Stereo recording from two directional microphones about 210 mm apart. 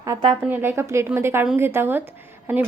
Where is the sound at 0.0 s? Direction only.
20° right (ahead or behind).